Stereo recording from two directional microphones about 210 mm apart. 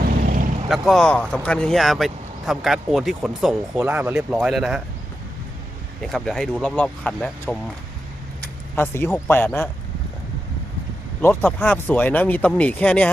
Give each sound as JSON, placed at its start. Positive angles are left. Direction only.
{"t": 0.2, "sound": "vehicle", "side_deg": -40}
{"t": 0.7, "sound": "speech", "side_deg": 0}
{"t": 6.0, "sound": "speech", "side_deg": 0}
{"t": 8.7, "sound": "speech", "side_deg": 10}
{"t": 11.2, "sound": "speech", "side_deg": 10}